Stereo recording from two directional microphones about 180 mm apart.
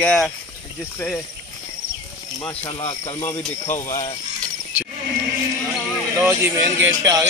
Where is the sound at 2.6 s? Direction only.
30° left (ahead or behind).